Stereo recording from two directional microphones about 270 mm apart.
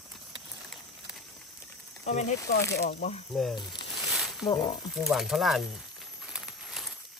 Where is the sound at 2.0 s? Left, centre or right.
Left.